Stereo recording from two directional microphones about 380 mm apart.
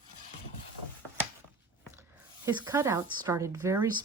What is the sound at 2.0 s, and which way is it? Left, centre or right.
Speech, centre.